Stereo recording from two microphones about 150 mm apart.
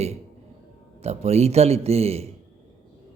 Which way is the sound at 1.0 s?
45° right (ahead or behind).